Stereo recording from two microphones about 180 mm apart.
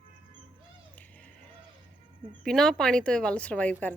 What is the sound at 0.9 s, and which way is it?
Cat, 10° left (ahead or behind).